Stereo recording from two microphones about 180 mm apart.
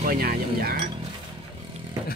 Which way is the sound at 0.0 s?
50° right (ahead or behind).